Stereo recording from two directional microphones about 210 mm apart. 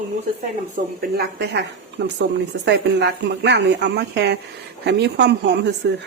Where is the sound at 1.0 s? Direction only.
50° right (ahead or behind).